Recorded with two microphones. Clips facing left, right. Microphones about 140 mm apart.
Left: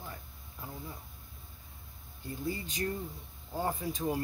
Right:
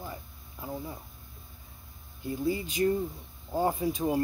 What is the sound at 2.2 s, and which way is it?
Speech, 15° right (ahead or behind).